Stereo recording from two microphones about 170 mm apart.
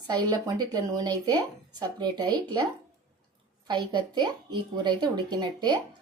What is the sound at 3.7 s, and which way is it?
Speech, 25° right (ahead or behind).